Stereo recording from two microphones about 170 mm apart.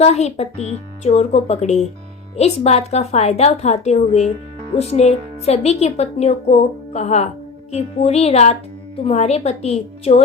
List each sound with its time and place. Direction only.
0.0 s a woman's voice: 40° left (ahead or behind)